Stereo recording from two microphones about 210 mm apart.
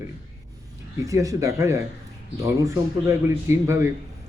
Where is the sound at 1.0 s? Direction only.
15° right (ahead or behind).